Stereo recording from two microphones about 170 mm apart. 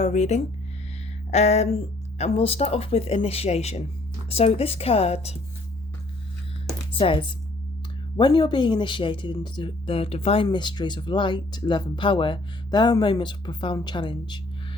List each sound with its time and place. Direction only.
0.0 s speech: 40° left (ahead or behind)
7.0 s speech: 30° left (ahead or behind)